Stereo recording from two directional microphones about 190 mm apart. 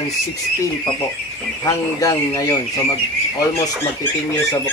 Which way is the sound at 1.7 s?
15° left (ahead or behind).